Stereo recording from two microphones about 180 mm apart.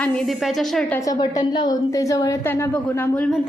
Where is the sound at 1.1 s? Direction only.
25° left (ahead or behind).